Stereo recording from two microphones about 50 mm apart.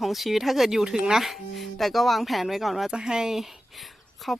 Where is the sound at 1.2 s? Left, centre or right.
Centre.